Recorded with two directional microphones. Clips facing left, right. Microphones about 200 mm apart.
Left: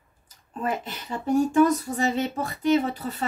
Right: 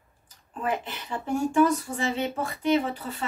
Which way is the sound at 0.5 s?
40° left (ahead or behind).